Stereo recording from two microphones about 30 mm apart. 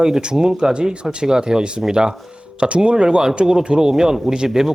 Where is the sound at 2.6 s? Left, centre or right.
Right.